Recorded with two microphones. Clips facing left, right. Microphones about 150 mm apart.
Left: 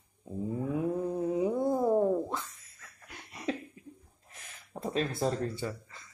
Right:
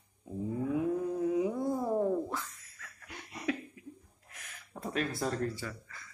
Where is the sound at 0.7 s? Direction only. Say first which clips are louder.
Even; 25° left (ahead or behind).